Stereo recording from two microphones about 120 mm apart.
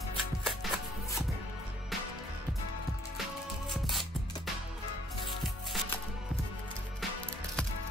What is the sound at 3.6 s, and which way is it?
Music, centre (ahead or behind).